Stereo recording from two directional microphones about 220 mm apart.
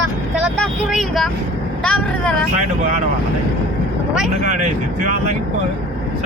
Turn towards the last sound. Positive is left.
turn(degrees=-35)  # may be behind; listen again after turning